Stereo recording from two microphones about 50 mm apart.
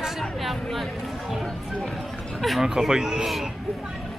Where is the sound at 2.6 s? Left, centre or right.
Centre.